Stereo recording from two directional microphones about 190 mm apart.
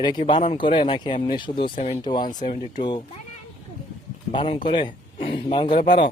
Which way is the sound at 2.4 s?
45° left (ahead or behind).